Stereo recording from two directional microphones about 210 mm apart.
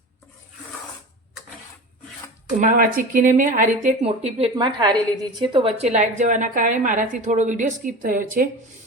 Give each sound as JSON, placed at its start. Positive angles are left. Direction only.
{"t": 2.6, "sound": "speech", "side_deg": -40}